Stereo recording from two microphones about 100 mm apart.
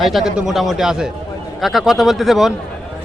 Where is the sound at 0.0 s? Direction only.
5° right (ahead or behind).